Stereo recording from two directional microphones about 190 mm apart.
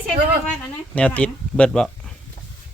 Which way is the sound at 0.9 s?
5° left (ahead or behind).